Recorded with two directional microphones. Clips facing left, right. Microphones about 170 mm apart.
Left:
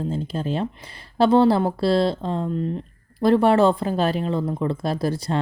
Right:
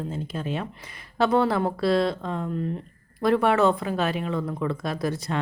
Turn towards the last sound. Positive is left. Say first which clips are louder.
# left 4 dB
turn(degrees=30)  # may be behind; listen again after turning